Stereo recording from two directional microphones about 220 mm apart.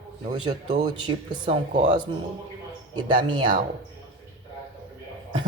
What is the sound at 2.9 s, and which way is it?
Speech, 20° right (ahead or behind).